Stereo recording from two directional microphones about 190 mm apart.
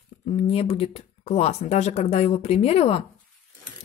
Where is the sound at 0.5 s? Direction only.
30° left (ahead or behind).